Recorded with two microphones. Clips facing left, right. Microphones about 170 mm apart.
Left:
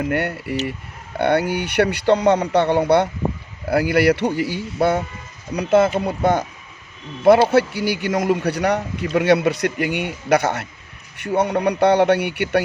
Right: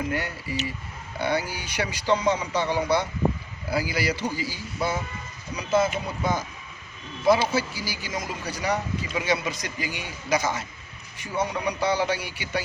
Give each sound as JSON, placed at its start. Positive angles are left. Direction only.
{"t": 0.0, "sound": "speech", "side_deg": 65}